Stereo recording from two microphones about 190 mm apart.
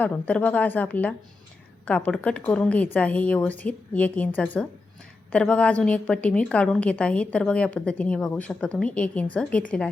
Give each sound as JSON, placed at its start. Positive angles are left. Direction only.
{"t": 0.0, "sound": "a woman's voice", "side_deg": 10}